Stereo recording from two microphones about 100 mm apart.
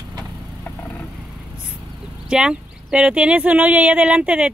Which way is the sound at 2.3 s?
10° right (ahead or behind).